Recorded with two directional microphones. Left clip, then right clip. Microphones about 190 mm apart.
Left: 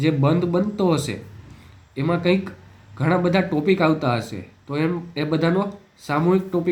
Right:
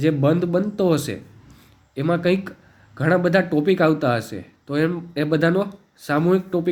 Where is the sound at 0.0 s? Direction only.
35° right (ahead or behind).